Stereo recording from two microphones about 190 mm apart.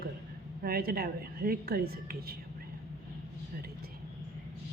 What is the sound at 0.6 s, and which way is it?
A woman's voice, 55° right (ahead or behind).